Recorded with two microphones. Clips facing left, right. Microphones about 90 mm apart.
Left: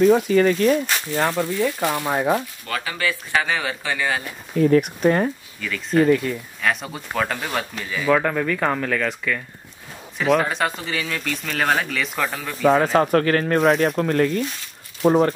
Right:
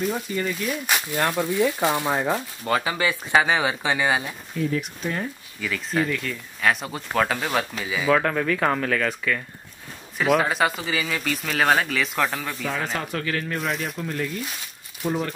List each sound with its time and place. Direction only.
0.0 s speech: 90° left
1.3 s speech: 15° right (ahead or behind)
2.0 s speech: 15° left (ahead or behind)
2.6 s speech: 25° right (ahead or behind)
4.6 s speech: 55° left (ahead or behind)
5.6 s speech: centre (ahead or behind)
6.0 s speech: 35° left (ahead or behind)
6.6 s speech: centre (ahead or behind)
12.9 s speech: 50° left (ahead or behind)
13.9 s speech: 60° left (ahead or behind)